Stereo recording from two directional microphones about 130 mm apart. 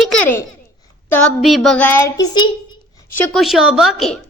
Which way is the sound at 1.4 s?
Centre (ahead or behind).